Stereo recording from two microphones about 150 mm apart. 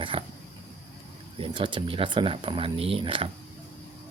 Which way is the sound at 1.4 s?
35° right (ahead or behind).